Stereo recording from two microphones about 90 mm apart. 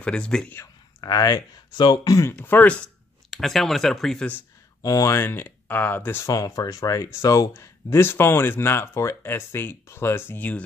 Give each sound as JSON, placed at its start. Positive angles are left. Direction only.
{"t": 0.0, "sound": "speech", "side_deg": 10}
{"t": 1.0, "sound": "speech", "side_deg": 45}
{"t": 2.3, "sound": "speech", "side_deg": 20}
{"t": 3.3, "sound": "speech", "side_deg": 0}
{"t": 4.8, "sound": "speech", "side_deg": 40}
{"t": 5.2, "sound": "speech", "side_deg": 25}
{"t": 6.2, "sound": "speech", "side_deg": 40}